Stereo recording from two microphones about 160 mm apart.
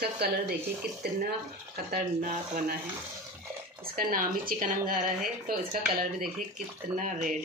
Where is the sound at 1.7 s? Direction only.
60° right (ahead or behind).